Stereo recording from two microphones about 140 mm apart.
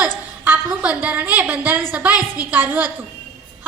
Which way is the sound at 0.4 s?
10° right (ahead or behind).